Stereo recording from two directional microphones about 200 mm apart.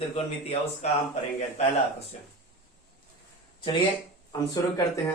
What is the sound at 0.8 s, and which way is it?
Speech, 35° left (ahead or behind).